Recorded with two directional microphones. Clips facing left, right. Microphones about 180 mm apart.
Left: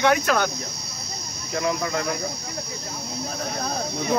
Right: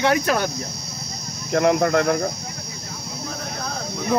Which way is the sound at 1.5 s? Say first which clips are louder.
Right 8 dB; 60° right (ahead or behind).